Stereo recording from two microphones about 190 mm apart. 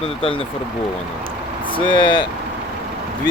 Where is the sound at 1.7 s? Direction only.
25° left (ahead or behind).